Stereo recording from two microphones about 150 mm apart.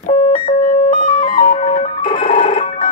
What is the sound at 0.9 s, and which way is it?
Music, 65° left (ahead or behind).